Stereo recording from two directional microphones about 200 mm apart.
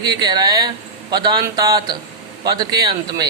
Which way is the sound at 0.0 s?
20° right (ahead or behind).